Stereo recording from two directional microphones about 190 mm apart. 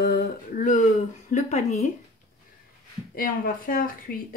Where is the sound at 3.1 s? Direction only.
50° left (ahead or behind).